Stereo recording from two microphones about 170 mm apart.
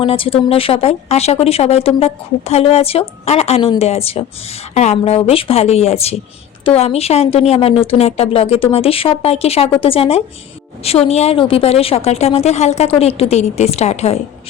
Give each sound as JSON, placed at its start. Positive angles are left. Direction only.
{"t": 0.0, "sound": "speech", "side_deg": 30}